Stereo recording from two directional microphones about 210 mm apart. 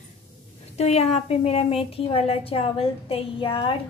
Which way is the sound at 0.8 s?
30° left (ahead or behind).